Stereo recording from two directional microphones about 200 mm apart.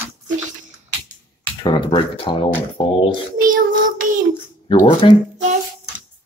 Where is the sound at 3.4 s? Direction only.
45° right (ahead or behind).